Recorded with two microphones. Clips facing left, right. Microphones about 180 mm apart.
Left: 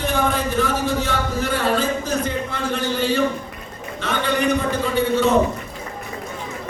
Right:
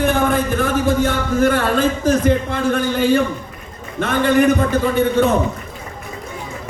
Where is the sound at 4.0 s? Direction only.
50° right (ahead or behind).